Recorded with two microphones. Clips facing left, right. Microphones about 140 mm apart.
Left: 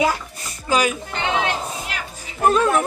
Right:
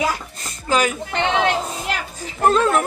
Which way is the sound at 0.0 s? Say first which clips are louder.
Left 2 dB; 15° left (ahead or behind).